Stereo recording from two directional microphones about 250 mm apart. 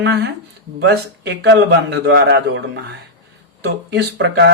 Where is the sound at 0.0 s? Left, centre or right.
Right.